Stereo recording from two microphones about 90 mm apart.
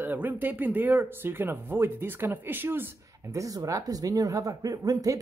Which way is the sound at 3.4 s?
40° right (ahead or behind).